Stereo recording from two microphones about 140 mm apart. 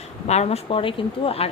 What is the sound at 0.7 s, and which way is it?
Speech, 40° left (ahead or behind).